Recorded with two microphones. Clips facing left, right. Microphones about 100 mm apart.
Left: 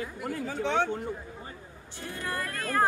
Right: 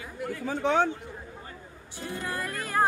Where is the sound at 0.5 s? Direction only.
45° right (ahead or behind).